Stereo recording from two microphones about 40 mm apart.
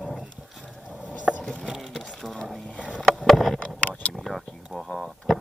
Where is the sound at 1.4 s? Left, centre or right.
Left.